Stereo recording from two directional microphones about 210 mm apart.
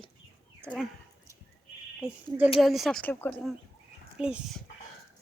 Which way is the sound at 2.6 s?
Centre (ahead or behind).